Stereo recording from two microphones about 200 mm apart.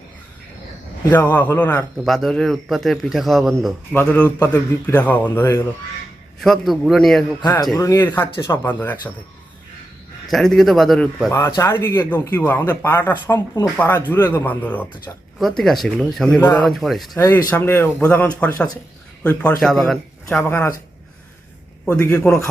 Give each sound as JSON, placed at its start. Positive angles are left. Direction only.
{"t": 1.1, "sound": "a man's voice", "side_deg": 10}
{"t": 6.4, "sound": "a man's voice", "side_deg": 0}
{"t": 7.4, "sound": "speech", "side_deg": 20}
{"t": 10.2, "sound": "a man's voice", "side_deg": 0}
{"t": 11.3, "sound": "a man's voice", "side_deg": 15}
{"t": 16.4, "sound": "speech", "side_deg": 10}
{"t": 16.6, "sound": "a man's voice", "side_deg": 0}
{"t": 17.2, "sound": "a man's voice", "side_deg": 15}
{"t": 21.8, "sound": "speech", "side_deg": 10}